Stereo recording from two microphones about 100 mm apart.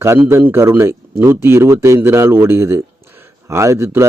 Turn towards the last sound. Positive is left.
turn(degrees=-30)  # may be behind; listen again after turning